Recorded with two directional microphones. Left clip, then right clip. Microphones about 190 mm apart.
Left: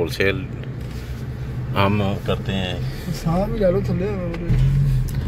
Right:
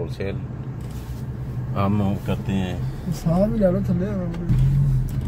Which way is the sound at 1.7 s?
5° right (ahead or behind).